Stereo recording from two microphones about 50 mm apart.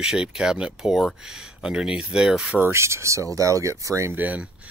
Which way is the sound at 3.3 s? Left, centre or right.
Right.